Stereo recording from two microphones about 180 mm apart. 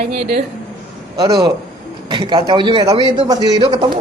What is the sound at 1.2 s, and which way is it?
A woman's voice, 20° right (ahead or behind).